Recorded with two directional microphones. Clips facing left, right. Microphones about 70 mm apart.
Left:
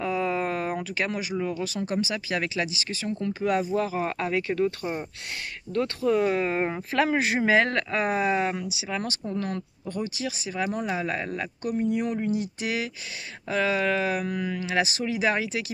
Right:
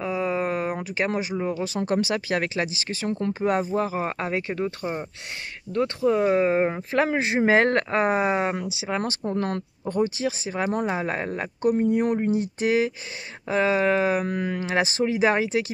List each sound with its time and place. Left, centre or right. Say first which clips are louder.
0.0 s a sound: right 1 dB; centre
1.8 s speech: right 6 dB; right
7.4 s speech: right 5 dB; right